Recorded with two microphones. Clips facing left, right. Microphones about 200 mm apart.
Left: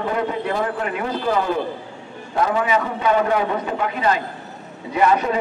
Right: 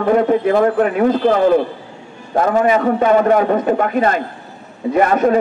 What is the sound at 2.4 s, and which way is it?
A man's voice, 50° right (ahead or behind).